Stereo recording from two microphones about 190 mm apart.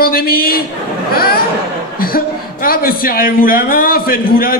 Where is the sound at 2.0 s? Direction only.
50° left (ahead or behind).